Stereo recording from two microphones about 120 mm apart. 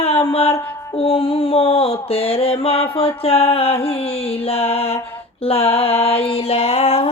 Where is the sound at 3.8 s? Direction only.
55° left (ahead or behind).